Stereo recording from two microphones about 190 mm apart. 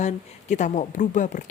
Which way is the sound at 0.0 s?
40° left (ahead or behind).